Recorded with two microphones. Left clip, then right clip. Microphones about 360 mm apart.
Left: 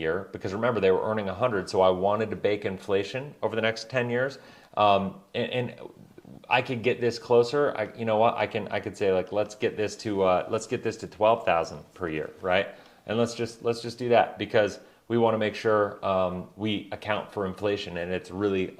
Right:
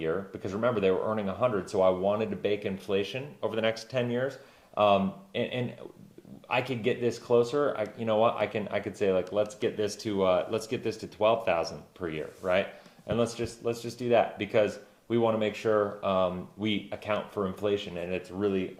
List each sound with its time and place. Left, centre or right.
0.0 s speech: left